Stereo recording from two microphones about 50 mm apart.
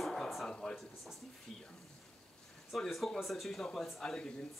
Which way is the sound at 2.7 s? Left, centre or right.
Centre.